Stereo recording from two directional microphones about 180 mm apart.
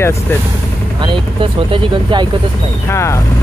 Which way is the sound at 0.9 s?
25° right (ahead or behind).